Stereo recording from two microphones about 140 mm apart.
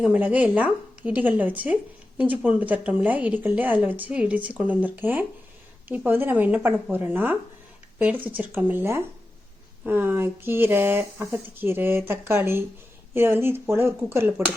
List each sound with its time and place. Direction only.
0.0 s speech: 10° right (ahead or behind)